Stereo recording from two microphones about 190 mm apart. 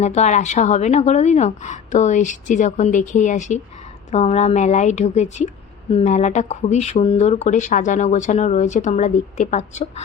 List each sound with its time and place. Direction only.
0.0 s speech: 35° left (ahead or behind)